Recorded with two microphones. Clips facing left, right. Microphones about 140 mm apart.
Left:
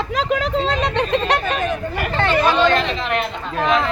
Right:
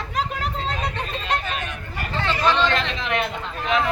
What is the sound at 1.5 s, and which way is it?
Speech, 40° left (ahead or behind).